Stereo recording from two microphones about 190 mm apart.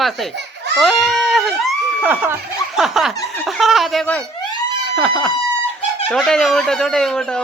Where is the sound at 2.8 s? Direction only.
Centre (ahead or behind).